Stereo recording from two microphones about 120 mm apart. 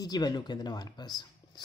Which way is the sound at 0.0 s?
35° left (ahead or behind).